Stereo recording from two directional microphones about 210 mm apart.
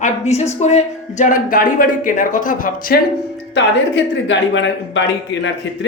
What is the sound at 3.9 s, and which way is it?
A man's voice, 60° left (ahead or behind).